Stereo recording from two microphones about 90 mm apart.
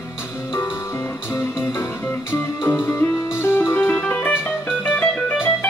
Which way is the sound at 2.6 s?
25° left (ahead or behind).